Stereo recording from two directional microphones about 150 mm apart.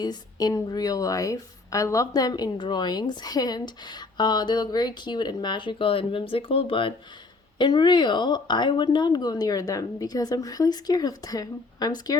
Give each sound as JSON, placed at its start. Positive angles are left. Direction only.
{"t": 0.0, "sound": "a woman's voice", "side_deg": 25}